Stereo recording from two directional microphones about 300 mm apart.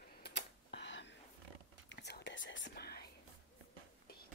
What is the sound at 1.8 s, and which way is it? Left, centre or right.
Whispering, left.